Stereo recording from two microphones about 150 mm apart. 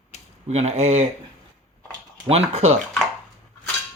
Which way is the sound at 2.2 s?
45° right (ahead or behind).